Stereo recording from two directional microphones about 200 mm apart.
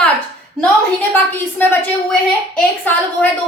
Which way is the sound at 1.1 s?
10° left (ahead or behind).